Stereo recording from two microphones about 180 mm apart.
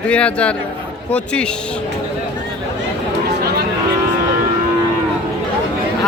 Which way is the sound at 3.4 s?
60° right (ahead or behind).